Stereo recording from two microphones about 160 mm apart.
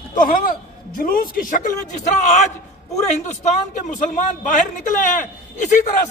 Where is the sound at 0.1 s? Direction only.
55° left (ahead or behind).